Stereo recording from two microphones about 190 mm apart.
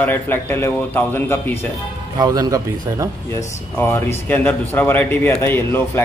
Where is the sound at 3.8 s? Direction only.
15° left (ahead or behind).